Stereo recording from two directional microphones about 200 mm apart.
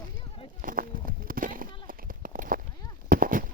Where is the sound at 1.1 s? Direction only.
45° right (ahead or behind).